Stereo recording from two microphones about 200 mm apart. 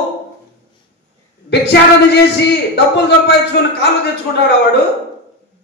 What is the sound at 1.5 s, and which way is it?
Speech, 60° left (ahead or behind).